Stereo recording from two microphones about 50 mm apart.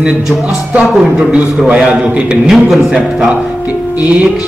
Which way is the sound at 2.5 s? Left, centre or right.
Centre.